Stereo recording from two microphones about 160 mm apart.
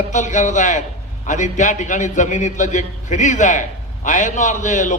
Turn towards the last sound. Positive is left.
turn(degrees=50)  # may be behind; listen again after turning